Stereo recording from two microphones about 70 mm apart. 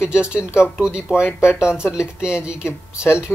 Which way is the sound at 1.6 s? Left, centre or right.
Centre.